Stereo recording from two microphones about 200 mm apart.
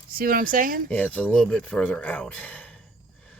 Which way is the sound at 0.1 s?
45° right (ahead or behind).